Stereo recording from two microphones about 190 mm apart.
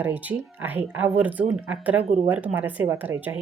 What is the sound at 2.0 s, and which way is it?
Speech, 35° right (ahead or behind).